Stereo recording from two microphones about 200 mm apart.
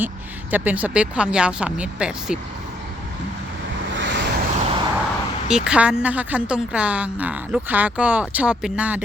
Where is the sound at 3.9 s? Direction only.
65° right (ahead or behind).